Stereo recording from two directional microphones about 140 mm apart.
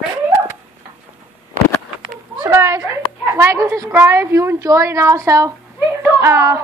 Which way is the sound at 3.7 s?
20° right (ahead or behind).